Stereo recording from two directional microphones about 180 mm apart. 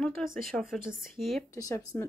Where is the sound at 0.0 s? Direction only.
Centre (ahead or behind).